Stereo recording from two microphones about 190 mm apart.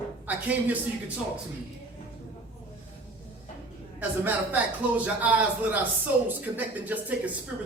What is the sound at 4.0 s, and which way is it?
Speech, 10° right (ahead or behind).